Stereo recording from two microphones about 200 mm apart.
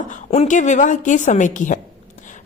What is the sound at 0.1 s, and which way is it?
A woman's voice, 35° left (ahead or behind).